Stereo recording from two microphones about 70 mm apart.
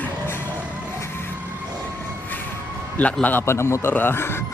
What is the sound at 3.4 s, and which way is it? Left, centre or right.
Speech, left.